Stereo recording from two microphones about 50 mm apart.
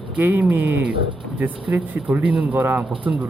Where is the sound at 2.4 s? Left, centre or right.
Right.